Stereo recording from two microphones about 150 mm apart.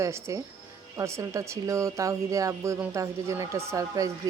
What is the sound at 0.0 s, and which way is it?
Speech, 20° right (ahead or behind).